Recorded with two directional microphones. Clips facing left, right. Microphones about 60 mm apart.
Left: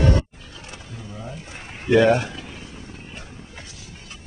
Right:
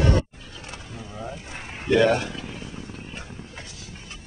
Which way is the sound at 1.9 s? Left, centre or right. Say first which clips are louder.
Left 3 dB; centre.